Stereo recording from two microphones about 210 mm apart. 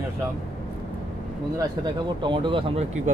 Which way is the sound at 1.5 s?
20° right (ahead or behind).